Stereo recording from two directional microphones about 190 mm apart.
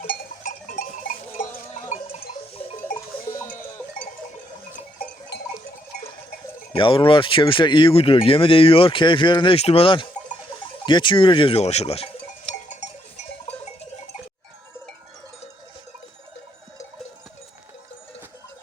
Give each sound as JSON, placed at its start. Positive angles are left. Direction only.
{"t": 0.4, "sound": "a sound", "side_deg": 40}
{"t": 6.7, "sound": "speech", "side_deg": 25}
{"t": 12.6, "sound": "goat", "side_deg": 40}